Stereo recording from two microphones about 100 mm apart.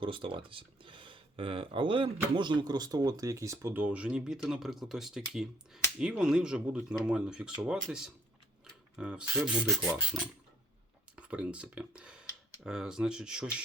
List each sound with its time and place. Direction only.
0.0 s speech: 60° right (ahead or behind); by 3.7 s 30° right (ahead or behind)
3.7 s speech: 15° right (ahead or behind)
11.3 s speech: 10° right (ahead or behind)